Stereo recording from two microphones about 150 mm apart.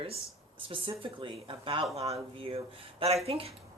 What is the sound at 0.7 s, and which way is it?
A woman's voice, 35° right (ahead or behind).